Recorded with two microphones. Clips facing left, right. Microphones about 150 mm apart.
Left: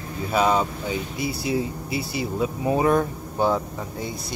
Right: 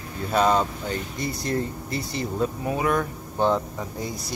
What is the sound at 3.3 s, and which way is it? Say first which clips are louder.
Speech: even; 5° left (ahead or behind).